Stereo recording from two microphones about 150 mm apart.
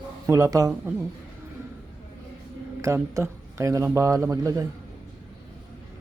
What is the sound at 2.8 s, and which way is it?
Speech, 20° right (ahead or behind).